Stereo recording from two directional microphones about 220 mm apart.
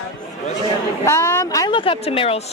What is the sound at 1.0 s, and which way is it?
Speech, 10° left (ahead or behind).